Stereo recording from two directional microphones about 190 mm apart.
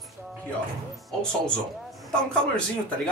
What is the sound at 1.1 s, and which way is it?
Speech, 5° left (ahead or behind).